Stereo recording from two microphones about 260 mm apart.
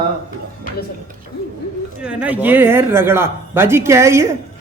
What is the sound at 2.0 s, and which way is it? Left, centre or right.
Speech, centre.